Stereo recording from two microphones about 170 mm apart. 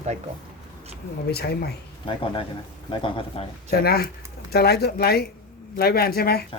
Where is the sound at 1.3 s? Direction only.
70° left (ahead or behind).